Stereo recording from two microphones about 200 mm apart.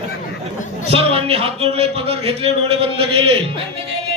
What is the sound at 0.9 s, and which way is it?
A man's voice, 30° right (ahead or behind).